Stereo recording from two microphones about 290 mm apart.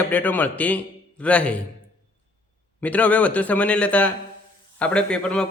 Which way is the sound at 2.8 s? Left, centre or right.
Centre.